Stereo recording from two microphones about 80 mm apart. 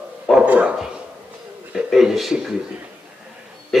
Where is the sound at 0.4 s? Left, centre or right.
Centre.